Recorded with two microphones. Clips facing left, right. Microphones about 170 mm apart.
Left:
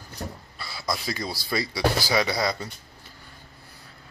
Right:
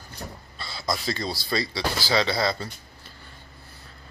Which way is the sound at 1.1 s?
20° right (ahead or behind).